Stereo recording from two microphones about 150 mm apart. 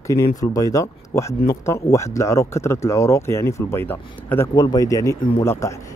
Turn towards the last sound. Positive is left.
turn(degrees=20)  # may be behind; listen again after turning